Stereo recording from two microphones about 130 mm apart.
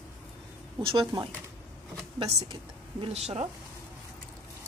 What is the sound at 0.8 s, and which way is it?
Speech, 35° right (ahead or behind).